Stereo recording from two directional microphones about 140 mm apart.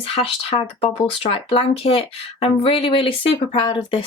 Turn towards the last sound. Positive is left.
turn(degrees=35)  # may be behind; listen again after turning